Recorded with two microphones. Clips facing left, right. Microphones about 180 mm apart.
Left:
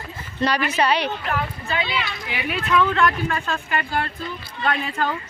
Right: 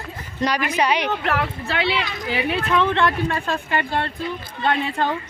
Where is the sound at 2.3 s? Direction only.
30° right (ahead or behind).